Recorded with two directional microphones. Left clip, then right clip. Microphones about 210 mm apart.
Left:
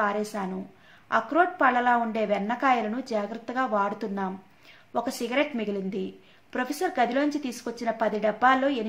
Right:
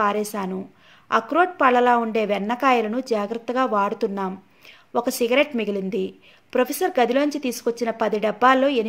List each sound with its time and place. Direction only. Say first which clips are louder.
0.0 s a woman's voice: right 5 dB; 45° right (ahead or behind)